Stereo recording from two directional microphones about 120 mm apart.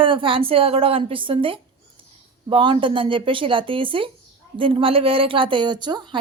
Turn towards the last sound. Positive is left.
turn(degrees=-40)  # may be behind; listen again after turning